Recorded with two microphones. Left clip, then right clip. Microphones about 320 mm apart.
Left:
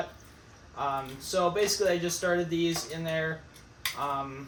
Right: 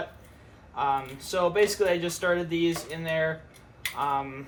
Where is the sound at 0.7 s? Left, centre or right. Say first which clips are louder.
Right 5 dB; centre.